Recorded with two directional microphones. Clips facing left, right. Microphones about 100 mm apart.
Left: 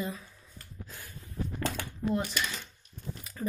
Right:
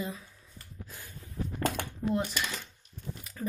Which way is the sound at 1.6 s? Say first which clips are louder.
Right 4 dB; 50° right (ahead or behind).